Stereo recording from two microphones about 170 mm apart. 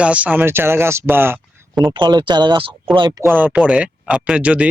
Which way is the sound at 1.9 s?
25° right (ahead or behind).